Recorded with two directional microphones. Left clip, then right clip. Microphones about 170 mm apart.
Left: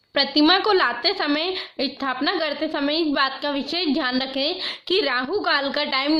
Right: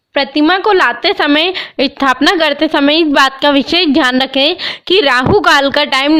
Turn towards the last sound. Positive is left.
turn(degrees=-60)  # may be behind; listen again after turning